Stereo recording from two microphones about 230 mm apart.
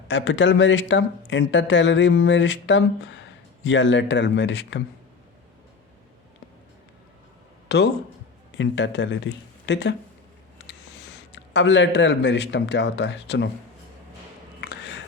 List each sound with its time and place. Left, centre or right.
0.1 s speech: left
7.7 s speech: left
11.3 s speech: left